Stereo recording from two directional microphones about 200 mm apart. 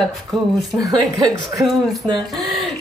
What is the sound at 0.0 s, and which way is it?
Speech, centre (ahead or behind).